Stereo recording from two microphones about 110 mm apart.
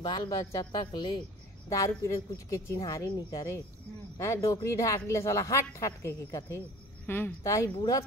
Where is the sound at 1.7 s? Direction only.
30° left (ahead or behind).